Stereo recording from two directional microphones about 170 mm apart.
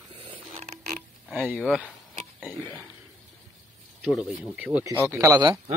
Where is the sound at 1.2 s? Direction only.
5° right (ahead or behind).